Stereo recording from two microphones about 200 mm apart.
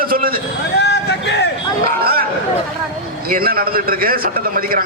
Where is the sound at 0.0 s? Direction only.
45° right (ahead or behind).